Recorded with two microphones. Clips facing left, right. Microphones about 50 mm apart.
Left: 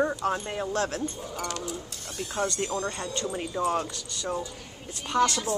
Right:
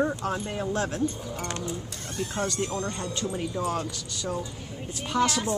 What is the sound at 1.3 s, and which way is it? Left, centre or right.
Speech, right.